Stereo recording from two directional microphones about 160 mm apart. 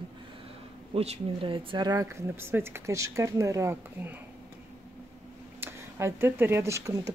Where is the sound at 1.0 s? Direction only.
35° right (ahead or behind); by 4.1 s 15° right (ahead or behind).